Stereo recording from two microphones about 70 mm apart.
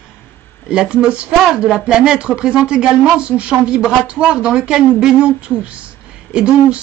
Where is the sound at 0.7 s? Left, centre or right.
Centre.